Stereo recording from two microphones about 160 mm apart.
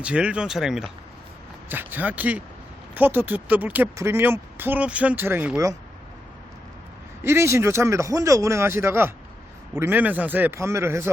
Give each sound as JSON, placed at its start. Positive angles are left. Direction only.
{"t": 0.0, "sound": "speech", "side_deg": -5}
{"t": 7.2, "sound": "speech", "side_deg": -15}